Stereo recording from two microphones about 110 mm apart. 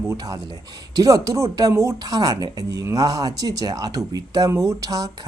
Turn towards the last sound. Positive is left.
turn(degrees=-35)  # may be behind; listen again after turning